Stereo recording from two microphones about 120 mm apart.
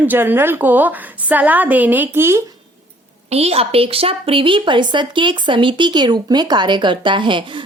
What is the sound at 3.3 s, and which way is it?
A woman's voice, 60° right (ahead or behind).